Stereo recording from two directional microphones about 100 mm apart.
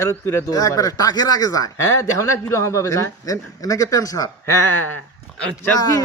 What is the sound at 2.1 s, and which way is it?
Speech, 30° left (ahead or behind).